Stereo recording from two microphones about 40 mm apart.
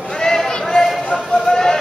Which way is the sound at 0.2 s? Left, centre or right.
Centre.